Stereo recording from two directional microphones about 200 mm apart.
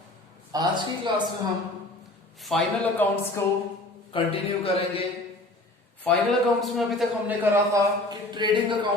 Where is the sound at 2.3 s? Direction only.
Centre (ahead or behind).